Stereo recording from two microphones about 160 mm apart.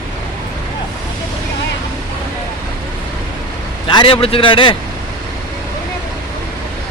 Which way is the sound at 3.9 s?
30° left (ahead or behind).